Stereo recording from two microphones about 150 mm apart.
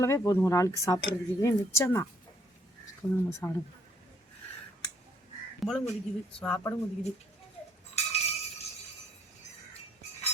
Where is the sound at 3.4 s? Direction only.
10° left (ahead or behind).